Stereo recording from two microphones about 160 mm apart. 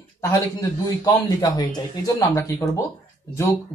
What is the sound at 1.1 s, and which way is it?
Speech, 25° left (ahead or behind).